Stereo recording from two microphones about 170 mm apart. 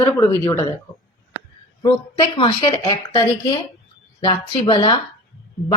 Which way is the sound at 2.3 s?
30° left (ahead or behind).